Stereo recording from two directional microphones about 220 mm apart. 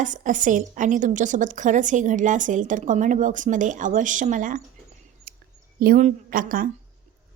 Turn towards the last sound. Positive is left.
turn(degrees=-40)  # may be behind; listen again after turning